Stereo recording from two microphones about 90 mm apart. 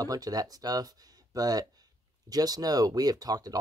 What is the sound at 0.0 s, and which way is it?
Speech, 45° right (ahead or behind).